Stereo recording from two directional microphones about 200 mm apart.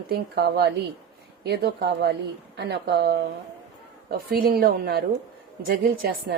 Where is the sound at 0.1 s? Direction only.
50° right (ahead or behind).